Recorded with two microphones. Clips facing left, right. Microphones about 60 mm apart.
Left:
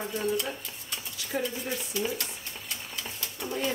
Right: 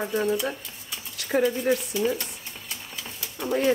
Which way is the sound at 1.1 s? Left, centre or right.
Right.